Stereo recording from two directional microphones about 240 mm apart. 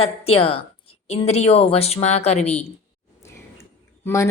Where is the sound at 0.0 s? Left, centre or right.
Left.